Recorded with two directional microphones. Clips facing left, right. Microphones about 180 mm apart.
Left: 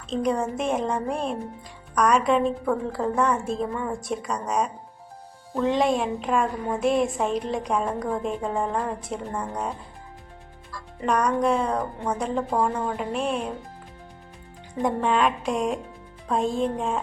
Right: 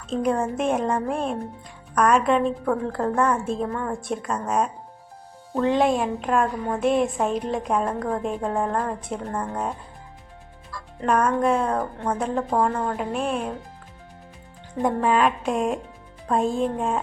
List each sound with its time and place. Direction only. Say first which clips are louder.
0.1 s a woman's voice: right 1 dB; 5° right (ahead or behind)
11.0 s a woman's voice: right 2 dB; centre (ahead or behind)
14.8 s a woman's voice: right 2 dB; centre (ahead or behind)